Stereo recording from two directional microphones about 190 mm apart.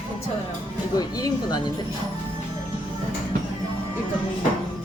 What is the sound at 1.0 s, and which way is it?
Speech, 20° left (ahead or behind).